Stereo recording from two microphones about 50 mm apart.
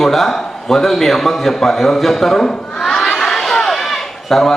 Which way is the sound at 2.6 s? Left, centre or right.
Centre.